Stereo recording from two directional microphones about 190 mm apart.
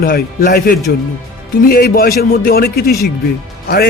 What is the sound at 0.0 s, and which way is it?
A man's voice, 50° left (ahead or behind).